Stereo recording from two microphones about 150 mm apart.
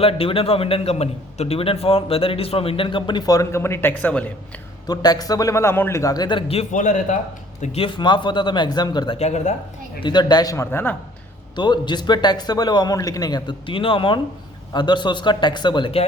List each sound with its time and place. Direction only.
0.0 s a man's voice: 40° left (ahead or behind); by 4.3 s 10° left (ahead or behind)
4.9 s a man's voice: 25° left (ahead or behind); by 7.2 s 55° left (ahead or behind)
7.6 s speech: 45° left (ahead or behind)
7.9 s a man's voice: 30° left (ahead or behind)
9.1 s speech: 45° left (ahead or behind)
10.0 s a man's voice: 30° left (ahead or behind)
11.5 s a man's voice: 30° left (ahead or behind)